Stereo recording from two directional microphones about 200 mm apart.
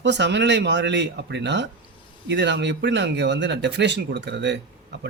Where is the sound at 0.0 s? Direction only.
60° right (ahead or behind).